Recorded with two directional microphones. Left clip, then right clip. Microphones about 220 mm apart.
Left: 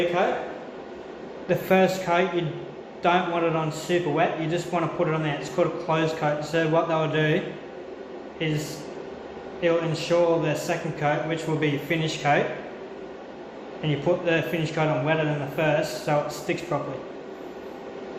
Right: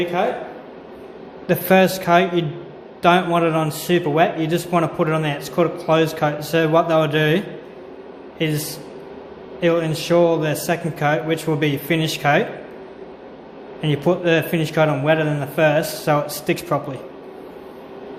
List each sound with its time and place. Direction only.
1.5 s a man's voice: 55° right (ahead or behind)
13.8 s a man's voice: 55° right (ahead or behind)